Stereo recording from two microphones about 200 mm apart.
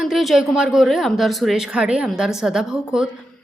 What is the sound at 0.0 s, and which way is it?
A woman's voice, centre (ahead or behind).